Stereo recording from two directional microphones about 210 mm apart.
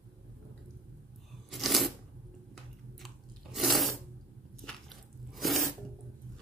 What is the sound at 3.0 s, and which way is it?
Crunch, centre (ahead or behind).